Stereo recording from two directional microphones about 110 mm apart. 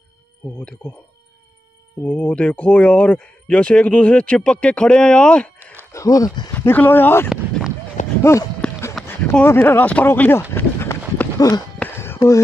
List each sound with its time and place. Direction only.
0.6 s speech: 10° left (ahead or behind)
2.0 s speech: 10° left (ahead or behind)
5.9 s speech: 30° left (ahead or behind)
6.5 s speech: 20° left (ahead or behind)
7.2 s a sound: 5° right (ahead or behind)
8.2 s speech: 25° left (ahead or behind)
9.0 s a sound: centre (ahead or behind)
9.3 s speech: 15° left (ahead or behind)
10.5 s run: 20° left (ahead or behind)
11.8 s a sound: 20° left (ahead or behind)